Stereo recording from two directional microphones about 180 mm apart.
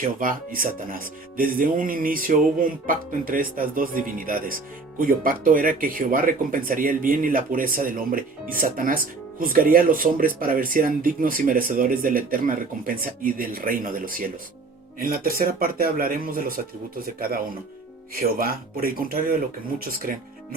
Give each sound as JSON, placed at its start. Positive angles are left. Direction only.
{"t": 0.0, "sound": "speech", "side_deg": -50}